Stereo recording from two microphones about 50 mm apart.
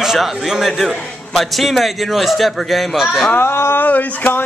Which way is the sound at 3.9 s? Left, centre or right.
Left.